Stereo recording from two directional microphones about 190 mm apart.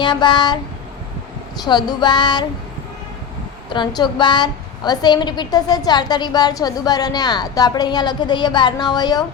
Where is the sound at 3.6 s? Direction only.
25° left (ahead or behind).